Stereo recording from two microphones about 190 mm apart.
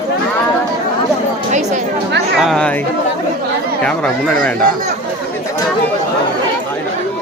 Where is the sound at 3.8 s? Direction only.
5° left (ahead or behind).